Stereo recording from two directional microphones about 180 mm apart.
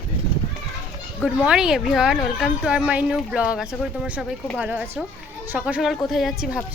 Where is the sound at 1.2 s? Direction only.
5° right (ahead or behind).